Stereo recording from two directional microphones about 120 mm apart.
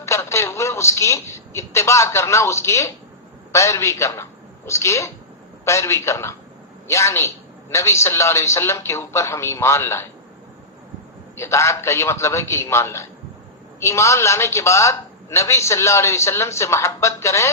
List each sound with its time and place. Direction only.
0.0 s a woman's voice: 25° left (ahead or behind)
11.3 s a woman's voice: 25° left (ahead or behind)